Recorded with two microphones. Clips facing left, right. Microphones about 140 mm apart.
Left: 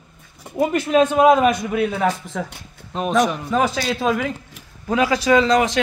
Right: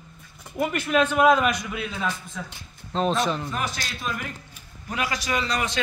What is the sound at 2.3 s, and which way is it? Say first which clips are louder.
Speech: left 9 dB; 70° left (ahead or behind).